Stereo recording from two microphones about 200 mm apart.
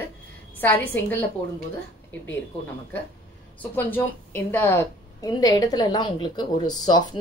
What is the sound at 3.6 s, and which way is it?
A woman's voice, 10° left (ahead or behind).